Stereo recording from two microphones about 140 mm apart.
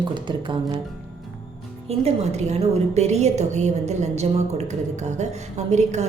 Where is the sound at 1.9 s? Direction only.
50° right (ahead or behind).